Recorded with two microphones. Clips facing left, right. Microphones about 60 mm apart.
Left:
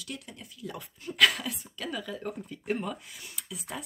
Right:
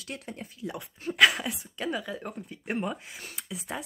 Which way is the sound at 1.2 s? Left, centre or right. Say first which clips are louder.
Right 3 dB; centre.